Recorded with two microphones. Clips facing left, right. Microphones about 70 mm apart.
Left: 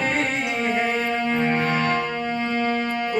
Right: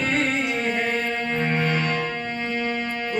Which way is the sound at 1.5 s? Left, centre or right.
Left.